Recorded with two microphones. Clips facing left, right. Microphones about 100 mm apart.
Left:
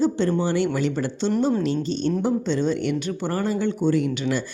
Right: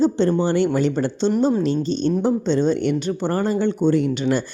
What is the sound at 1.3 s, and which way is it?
Speech, 15° right (ahead or behind).